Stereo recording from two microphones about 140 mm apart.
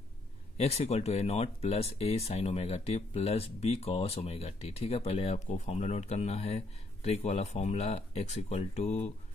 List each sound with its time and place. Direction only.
0.6 s speech: 45° left (ahead or behind)